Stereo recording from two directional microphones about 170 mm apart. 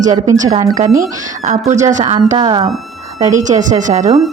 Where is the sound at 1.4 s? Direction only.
45° right (ahead or behind).